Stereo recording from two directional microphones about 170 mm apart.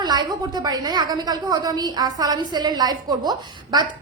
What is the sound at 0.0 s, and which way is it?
A woman's voice, 25° right (ahead or behind).